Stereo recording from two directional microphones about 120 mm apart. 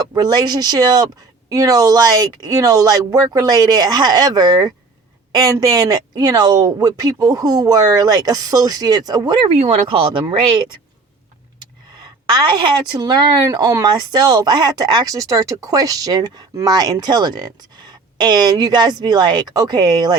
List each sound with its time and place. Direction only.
0.1 s speech: 35° right (ahead or behind)
12.2 s speech: 40° right (ahead or behind)